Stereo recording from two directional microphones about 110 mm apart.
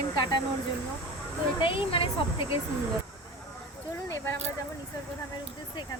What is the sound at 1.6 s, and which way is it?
Speech, 50° left (ahead or behind).